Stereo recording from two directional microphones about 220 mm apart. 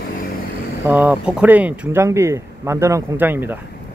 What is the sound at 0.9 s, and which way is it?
Speech, 5° right (ahead or behind).